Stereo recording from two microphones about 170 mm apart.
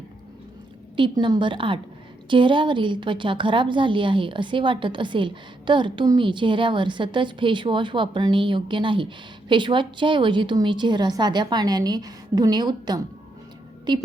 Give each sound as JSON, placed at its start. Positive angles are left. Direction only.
{"t": 0.9, "sound": "a woman's voice", "side_deg": -30}